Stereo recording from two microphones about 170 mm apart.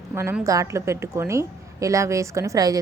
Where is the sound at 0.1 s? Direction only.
15° right (ahead or behind).